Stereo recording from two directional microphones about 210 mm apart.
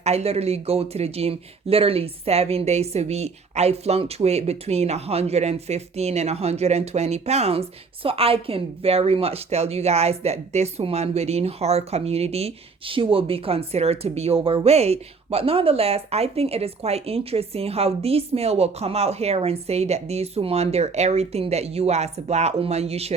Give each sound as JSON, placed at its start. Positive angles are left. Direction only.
{"t": 0.0, "sound": "speech", "side_deg": -30}